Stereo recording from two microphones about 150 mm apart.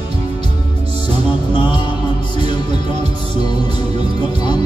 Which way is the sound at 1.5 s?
30° left (ahead or behind).